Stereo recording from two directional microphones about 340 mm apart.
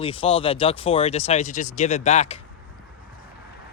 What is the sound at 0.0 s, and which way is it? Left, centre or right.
Speech, centre.